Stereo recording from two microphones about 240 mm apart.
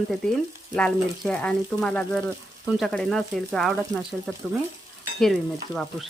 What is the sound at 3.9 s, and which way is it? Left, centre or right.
Speech, centre.